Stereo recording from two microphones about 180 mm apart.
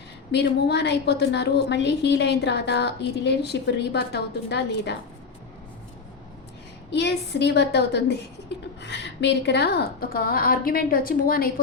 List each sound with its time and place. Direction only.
0.3 s a woman's voice: 70° left (ahead or behind)
6.9 s a woman's voice: 70° left (ahead or behind)